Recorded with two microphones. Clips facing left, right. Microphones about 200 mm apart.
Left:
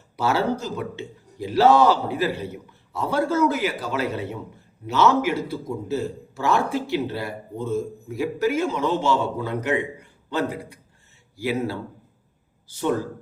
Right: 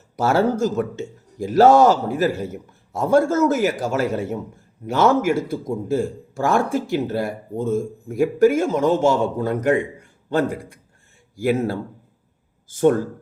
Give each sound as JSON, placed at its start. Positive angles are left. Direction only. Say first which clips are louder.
{"t": 0.2, "sound": "speech", "louder": "right 5 dB", "side_deg": -50}